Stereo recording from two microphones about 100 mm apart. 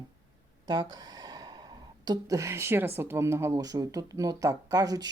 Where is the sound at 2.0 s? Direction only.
30° right (ahead or behind).